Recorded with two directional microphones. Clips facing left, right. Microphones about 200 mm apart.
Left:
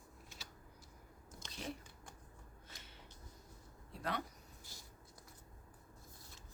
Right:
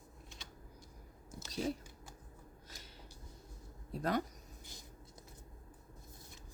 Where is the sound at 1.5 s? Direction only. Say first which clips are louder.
Right 9 dB; 40° right (ahead or behind).